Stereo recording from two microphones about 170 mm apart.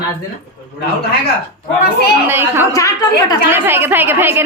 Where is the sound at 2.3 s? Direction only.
15° right (ahead or behind).